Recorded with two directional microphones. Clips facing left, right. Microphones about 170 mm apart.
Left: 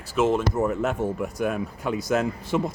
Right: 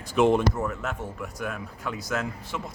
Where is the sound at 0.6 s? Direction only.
20° left (ahead or behind).